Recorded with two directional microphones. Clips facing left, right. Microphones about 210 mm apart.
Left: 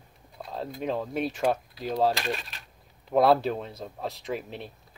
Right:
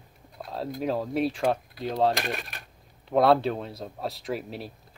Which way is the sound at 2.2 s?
55° right (ahead or behind).